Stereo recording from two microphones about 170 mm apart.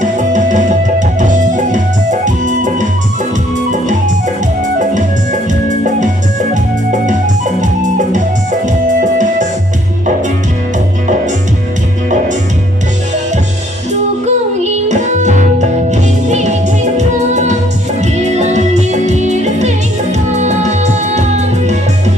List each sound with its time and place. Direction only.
0.0 s music: 45° right (ahead or behind)
3.7 s music: 45° right (ahead or behind)
5.5 s music: 45° right (ahead or behind)
14.3 s music: 45° right (ahead or behind)